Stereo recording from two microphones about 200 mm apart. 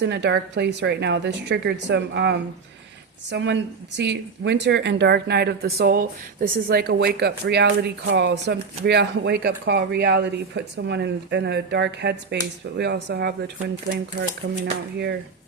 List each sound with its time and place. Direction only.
0.0 s speech: 60° right (ahead or behind)